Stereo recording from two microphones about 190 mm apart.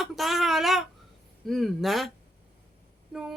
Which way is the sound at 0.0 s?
Centre (ahead or behind).